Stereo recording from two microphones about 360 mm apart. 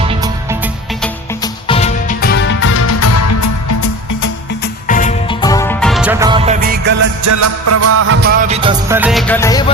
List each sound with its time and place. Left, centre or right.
0.0 s music: centre
1.4 s music: centre; by 4.3 s left
4.6 s music: left; by 6.9 s right
7.3 s music: right; by 9.7 s centre